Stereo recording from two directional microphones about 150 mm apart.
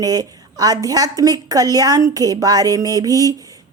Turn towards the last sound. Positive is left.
turn(degrees=-25)  # may be behind; listen again after turning